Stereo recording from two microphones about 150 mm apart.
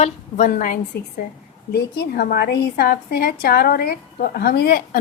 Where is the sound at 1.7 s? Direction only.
90° left.